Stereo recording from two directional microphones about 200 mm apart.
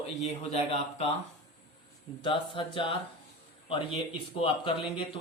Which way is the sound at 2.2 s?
25° left (ahead or behind).